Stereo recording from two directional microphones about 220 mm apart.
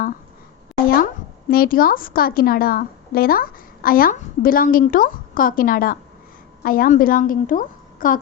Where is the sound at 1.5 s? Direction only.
40° left (ahead or behind).